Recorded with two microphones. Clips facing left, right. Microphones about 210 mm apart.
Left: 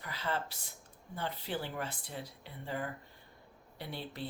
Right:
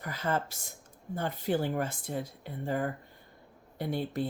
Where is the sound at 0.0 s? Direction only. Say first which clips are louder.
Right 5 dB; 45° right (ahead or behind).